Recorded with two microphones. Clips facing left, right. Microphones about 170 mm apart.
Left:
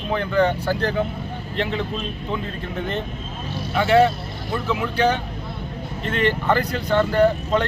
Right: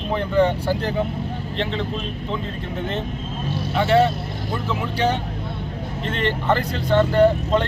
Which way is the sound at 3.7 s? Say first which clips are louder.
Left 1 dB; 5° left (ahead or behind).